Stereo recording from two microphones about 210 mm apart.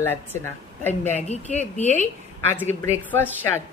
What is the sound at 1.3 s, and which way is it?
Speech, 30° left (ahead or behind).